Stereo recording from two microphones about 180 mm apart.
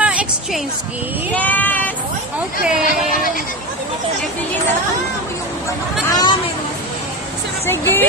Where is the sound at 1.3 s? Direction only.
10° left (ahead or behind).